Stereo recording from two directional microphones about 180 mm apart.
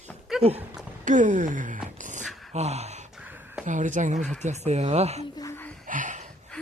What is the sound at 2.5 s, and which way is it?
Gasp, 35° right (ahead or behind).